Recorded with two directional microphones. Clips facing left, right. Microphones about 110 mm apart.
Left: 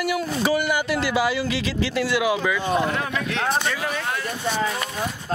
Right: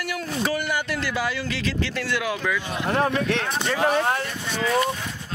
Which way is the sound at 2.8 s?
40° right (ahead or behind).